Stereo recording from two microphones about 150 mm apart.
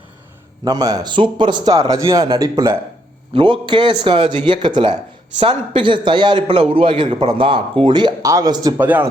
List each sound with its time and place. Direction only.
0.6 s a man's voice: 25° right (ahead or behind)
3.3 s a man's voice: 35° right (ahead or behind)
8.8 s speech: 10° right (ahead or behind)